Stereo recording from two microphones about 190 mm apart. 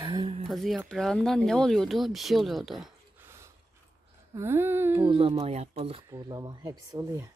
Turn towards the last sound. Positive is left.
turn(degrees=-20)  # may be behind; listen again after turning